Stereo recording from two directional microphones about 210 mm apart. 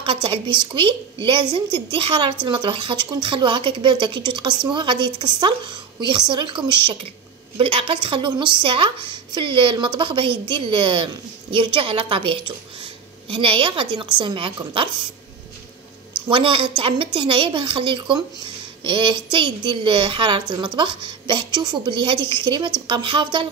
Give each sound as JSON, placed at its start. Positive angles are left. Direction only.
{"t": 0.0, "sound": "a woman's voice", "side_deg": -25}
{"t": 16.3, "sound": "a woman's voice", "side_deg": -25}